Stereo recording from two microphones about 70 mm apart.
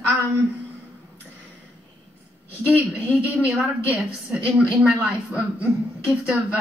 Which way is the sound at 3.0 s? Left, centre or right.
Right.